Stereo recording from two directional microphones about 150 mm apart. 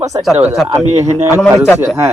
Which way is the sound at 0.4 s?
5° right (ahead or behind).